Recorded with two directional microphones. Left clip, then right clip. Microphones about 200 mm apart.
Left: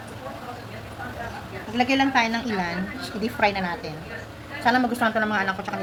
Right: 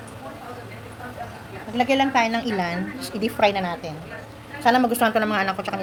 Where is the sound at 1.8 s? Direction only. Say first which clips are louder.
Right 1 dB; 35° right (ahead or behind).